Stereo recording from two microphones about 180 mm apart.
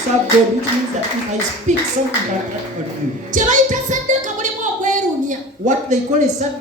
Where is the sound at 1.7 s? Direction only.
40° right (ahead or behind).